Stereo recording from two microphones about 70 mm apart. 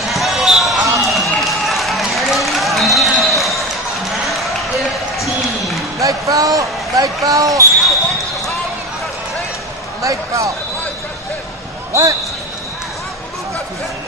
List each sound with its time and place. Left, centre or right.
0.1 s run: centre
5.2 s basketball bounce: centre
5.9 s a sound: right
10.0 s basketball bounce: right
11.9 s speech: right